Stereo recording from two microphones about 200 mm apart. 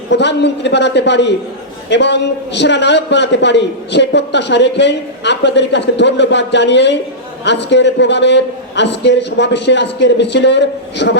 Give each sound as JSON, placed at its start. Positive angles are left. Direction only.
{"t": 0.1, "sound": "a man's voice", "side_deg": 60}